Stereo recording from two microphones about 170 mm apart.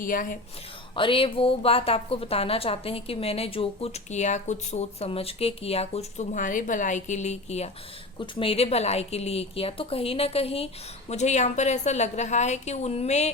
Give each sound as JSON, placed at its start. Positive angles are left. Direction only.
{"t": 0.0, "sound": "a woman's voice", "side_deg": 55}
{"t": 0.9, "sound": "a woman's voice", "side_deg": 30}